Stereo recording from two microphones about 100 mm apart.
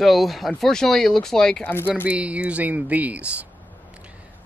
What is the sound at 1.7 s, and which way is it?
Speech, 20° left (ahead or behind).